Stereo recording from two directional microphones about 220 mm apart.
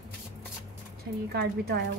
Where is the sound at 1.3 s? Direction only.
45° right (ahead or behind).